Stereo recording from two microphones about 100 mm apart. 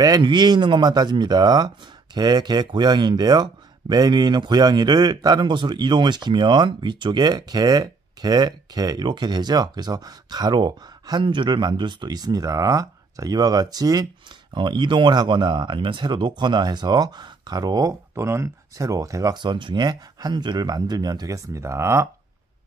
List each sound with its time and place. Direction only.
0.2 s speech: 50° right (ahead or behind)
14.5 s speech: 50° right (ahead or behind); by 19.4 s 35° right (ahead or behind)
19.4 s speech: 50° right (ahead or behind); by 22.1 s 25° right (ahead or behind)